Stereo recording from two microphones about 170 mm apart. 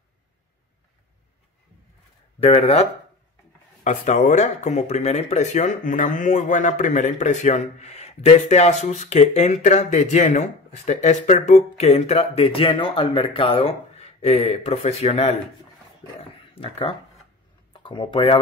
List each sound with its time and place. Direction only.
2.4 s speech: 35° left (ahead or behind)
3.8 s speech: 45° left (ahead or behind); by 18.4 s 30° left (ahead or behind)